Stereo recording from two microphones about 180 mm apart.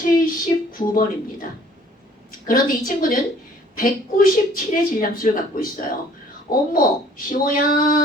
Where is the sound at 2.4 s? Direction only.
50° left (ahead or behind).